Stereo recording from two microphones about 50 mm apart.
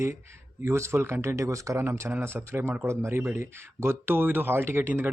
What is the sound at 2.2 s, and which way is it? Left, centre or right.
Speech, right.